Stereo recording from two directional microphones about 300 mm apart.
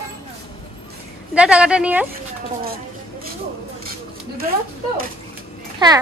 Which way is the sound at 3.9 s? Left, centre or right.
Right.